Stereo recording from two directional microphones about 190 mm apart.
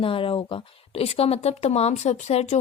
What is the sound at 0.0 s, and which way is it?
Speech, 30° left (ahead or behind).